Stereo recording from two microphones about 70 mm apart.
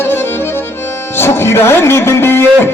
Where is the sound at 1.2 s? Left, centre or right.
Left.